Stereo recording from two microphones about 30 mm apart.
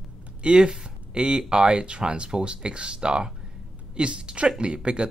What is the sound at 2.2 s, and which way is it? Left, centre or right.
Speech, right.